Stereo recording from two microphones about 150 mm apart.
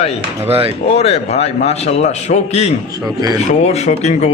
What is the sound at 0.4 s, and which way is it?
Speech, 40° right (ahead or behind).